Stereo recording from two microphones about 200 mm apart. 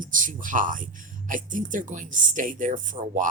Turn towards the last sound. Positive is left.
turn(degrees=-40)  # may be behind; listen again after turning